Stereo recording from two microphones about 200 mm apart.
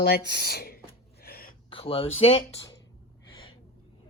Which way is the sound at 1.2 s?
50° left (ahead or behind).